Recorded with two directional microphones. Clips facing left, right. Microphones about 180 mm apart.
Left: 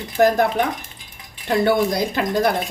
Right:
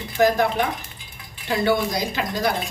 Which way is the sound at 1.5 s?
55° left (ahead or behind).